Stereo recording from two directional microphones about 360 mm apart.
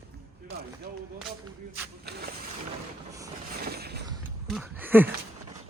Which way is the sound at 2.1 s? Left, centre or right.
Right.